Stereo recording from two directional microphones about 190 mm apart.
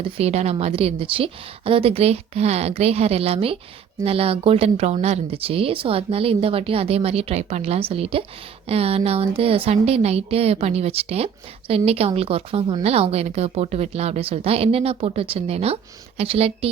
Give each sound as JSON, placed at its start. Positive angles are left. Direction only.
{"t": 0.2, "sound": "a woman's voice", "side_deg": -35}